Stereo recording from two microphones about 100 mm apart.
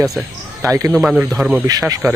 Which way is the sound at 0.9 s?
5° right (ahead or behind).